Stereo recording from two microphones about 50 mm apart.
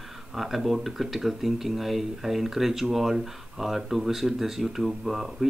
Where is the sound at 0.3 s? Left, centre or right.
Centre.